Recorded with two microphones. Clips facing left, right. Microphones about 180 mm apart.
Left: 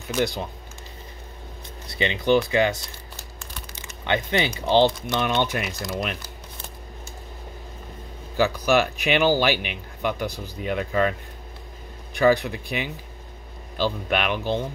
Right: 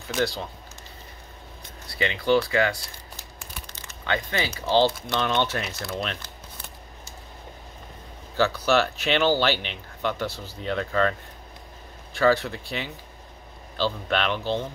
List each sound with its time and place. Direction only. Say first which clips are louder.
0.1 s speech: left 2 dB; 15° left (ahead or behind)
1.9 s speech: left 2 dB; 20° left (ahead or behind)
4.0 s speech: left 4 dB; 20° left (ahead or behind)
8.4 s speech: left 2 dB; 15° left (ahead or behind)